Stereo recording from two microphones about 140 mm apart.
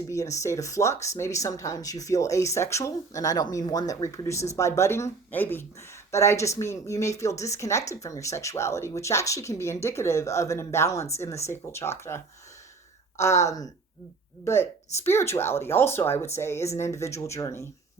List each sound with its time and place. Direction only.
0.1 s speech: 20° left (ahead or behind)
15.0 s speech: 20° left (ahead or behind)